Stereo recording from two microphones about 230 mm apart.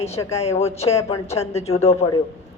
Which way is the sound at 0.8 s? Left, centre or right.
Left.